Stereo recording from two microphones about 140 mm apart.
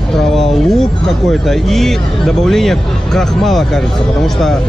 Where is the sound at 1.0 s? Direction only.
Centre (ahead or behind).